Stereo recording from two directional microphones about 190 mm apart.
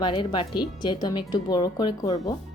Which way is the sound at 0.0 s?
25° left (ahead or behind).